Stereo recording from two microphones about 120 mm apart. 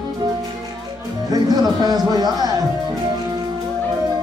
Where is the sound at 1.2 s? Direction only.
30° right (ahead or behind).